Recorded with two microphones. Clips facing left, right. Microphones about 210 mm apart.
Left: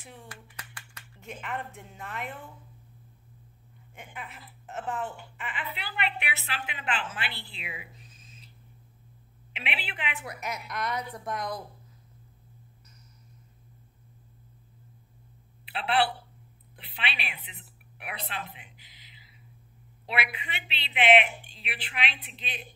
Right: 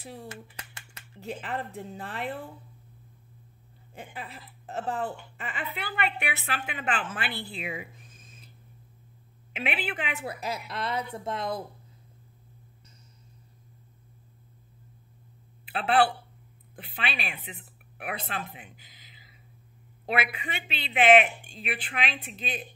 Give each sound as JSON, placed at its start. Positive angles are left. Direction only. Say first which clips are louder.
{"t": 0.0, "sound": "speech", "louder": "right 7 dB", "side_deg": -35}
{"t": 0.3, "sound": "speech", "louder": "right 5 dB", "side_deg": -25}
{"t": 3.9, "sound": "a woman's voice", "louder": "right 3 dB", "side_deg": -35}
{"t": 9.5, "sound": "a woman's voice", "louder": "right 6 dB", "side_deg": -45}
{"t": 10.2, "sound": "speech", "louder": "right 3 dB", "side_deg": -30}
{"t": 15.6, "sound": "a woman's voice", "louder": "right 3 dB", "side_deg": -45}